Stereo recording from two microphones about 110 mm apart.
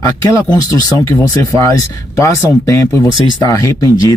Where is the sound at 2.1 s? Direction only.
25° left (ahead or behind).